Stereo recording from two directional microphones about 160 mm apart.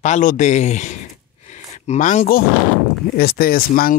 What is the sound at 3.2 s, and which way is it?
Speech, 70° left (ahead or behind).